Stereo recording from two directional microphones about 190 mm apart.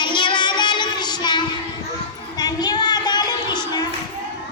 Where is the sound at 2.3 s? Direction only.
20° left (ahead or behind).